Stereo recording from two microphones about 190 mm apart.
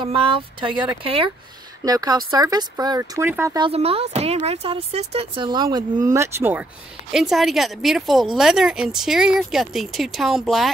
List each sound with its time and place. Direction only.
0.0 s speech: 25° right (ahead or behind)
3.5 s speech: 30° right (ahead or behind); by 10.7 s centre (ahead or behind)